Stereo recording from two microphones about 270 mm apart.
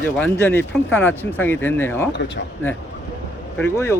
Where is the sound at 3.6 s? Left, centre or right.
Centre.